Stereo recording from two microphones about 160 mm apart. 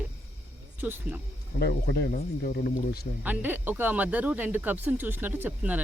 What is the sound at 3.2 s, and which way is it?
Speech, 10° right (ahead or behind).